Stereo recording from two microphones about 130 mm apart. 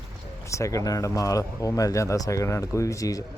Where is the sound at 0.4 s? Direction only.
25° left (ahead or behind).